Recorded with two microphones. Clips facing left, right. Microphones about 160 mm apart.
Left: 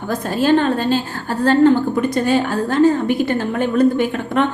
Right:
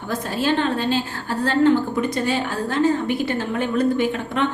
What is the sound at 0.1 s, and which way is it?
A woman's voice, 45° left (ahead or behind).